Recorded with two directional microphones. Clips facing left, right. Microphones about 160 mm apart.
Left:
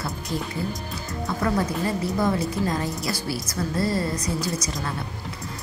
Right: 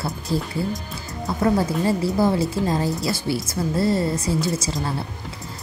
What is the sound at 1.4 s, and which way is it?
Speech, 25° right (ahead or behind).